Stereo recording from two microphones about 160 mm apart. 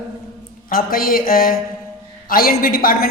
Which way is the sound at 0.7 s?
65° left (ahead or behind).